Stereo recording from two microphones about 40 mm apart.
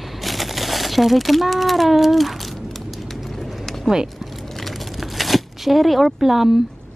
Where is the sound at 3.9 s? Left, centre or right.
Centre.